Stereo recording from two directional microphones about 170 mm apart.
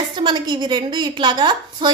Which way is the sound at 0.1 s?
25° right (ahead or behind).